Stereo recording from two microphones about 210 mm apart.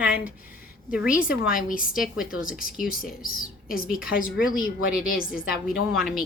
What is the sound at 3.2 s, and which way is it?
A woman's voice, 45° left (ahead or behind).